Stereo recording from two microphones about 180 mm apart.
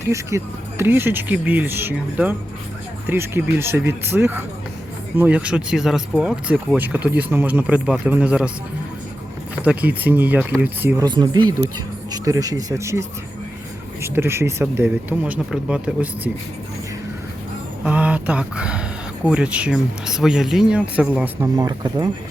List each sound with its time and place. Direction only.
0.0 s speech: 15° right (ahead or behind)
9.6 s speech: 10° right (ahead or behind)
17.8 s speech: 5° right (ahead or behind)
21.4 s speech: 20° right (ahead or behind)